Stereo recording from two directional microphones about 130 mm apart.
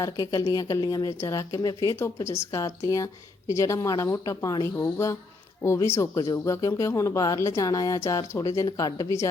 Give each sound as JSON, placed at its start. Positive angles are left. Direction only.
{"t": 0.0, "sound": "speech", "side_deg": 25}